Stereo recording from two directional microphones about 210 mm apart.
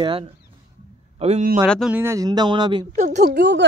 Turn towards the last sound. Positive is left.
turn(degrees=-55)  # may be behind; listen again after turning